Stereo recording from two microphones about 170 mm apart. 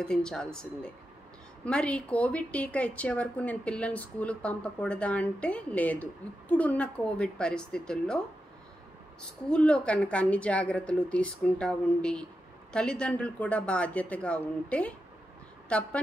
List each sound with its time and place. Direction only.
0.0 s speech: 5° left (ahead or behind)
9.5 s speech: 5° left (ahead or behind)